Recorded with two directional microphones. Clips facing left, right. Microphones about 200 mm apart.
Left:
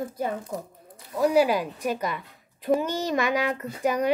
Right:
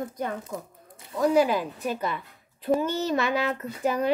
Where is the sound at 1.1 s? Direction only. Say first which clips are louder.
Left 1 dB; 10° left (ahead or behind).